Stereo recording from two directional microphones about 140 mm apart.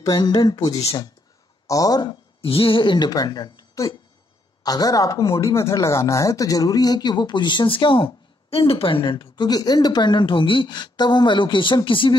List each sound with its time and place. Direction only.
0.0 s speech: 30° left (ahead or behind)